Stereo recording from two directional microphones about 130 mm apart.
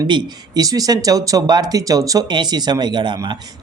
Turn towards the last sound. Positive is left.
turn(degrees=-35)  # may be behind; listen again after turning